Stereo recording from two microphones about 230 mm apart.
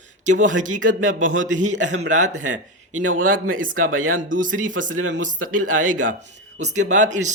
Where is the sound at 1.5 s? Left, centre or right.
Right.